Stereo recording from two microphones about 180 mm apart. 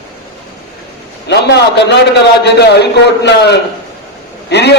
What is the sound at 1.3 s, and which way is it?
A man's voice, 70° left (ahead or behind).